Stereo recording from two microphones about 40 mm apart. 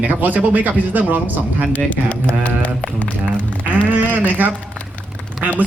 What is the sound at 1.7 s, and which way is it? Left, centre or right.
Speech, left.